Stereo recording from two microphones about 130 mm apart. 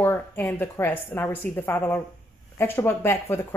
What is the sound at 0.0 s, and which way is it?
A woman's voice, 15° left (ahead or behind).